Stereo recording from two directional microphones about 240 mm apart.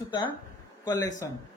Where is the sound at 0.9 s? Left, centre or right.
Centre.